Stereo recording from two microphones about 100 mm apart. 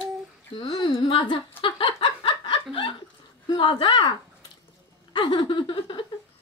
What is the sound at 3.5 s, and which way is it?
Speech, 50° left (ahead or behind).